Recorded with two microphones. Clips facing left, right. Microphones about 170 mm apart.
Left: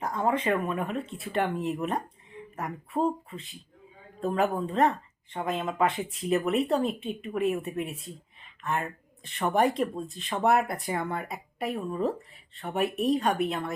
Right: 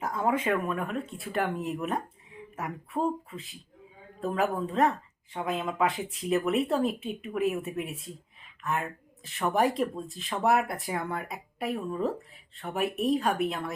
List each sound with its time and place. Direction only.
0.0 s speech: 5° right (ahead or behind)